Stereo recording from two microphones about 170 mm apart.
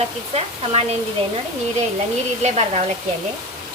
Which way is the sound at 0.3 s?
35° right (ahead or behind).